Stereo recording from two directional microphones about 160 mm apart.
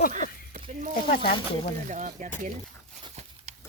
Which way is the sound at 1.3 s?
35° left (ahead or behind).